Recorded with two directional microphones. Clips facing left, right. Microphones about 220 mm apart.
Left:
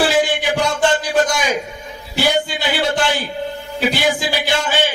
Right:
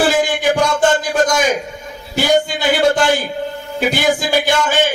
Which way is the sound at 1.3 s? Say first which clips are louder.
Right 4 dB; 45° right (ahead or behind).